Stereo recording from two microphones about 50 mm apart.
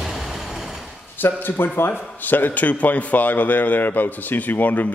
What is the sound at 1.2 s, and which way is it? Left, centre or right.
A man's voice, left.